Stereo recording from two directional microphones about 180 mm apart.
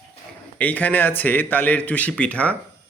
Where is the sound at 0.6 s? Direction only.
10° left (ahead or behind).